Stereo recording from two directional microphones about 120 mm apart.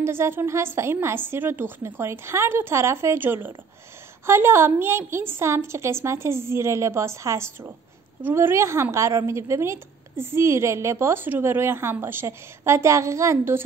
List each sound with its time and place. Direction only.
0.0 s a woman's voice: 20° right (ahead or behind)